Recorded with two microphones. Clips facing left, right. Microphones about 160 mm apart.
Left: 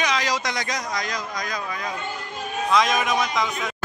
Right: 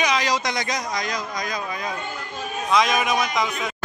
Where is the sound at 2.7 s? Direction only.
5° right (ahead or behind).